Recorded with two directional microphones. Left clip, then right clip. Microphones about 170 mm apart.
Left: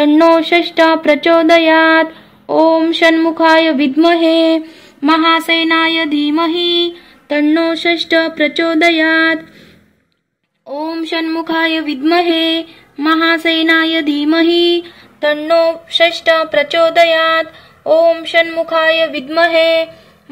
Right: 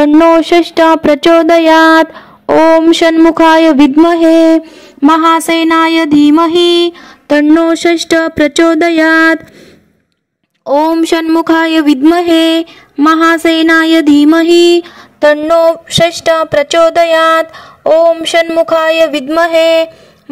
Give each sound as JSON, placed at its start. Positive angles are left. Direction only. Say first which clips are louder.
{"t": 0.4, "sound": "speech", "louder": "right 3 dB", "side_deg": -50}
{"t": 6.4, "sound": "a sound", "louder": "right 6 dB", "side_deg": -50}
{"t": 7.6, "sound": "speech", "louder": "right 4 dB", "side_deg": -55}
{"t": 10.6, "sound": "speech", "louder": "right 12 dB", "side_deg": -55}